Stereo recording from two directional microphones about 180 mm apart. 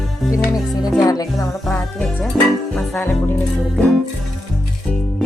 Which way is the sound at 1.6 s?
Centre (ahead or behind).